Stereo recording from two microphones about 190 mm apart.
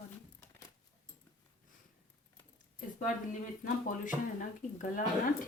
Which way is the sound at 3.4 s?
45° left (ahead or behind).